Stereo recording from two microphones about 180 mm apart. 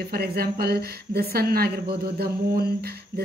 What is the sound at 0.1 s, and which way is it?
Speech, 60° right (ahead or behind).